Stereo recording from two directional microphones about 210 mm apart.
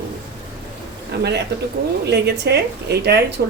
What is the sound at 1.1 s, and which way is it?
A man's voice, 55° right (ahead or behind).